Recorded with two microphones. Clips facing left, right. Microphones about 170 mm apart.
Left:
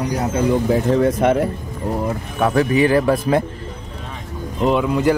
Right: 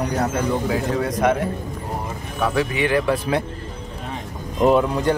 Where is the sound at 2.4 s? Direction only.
45° left (ahead or behind).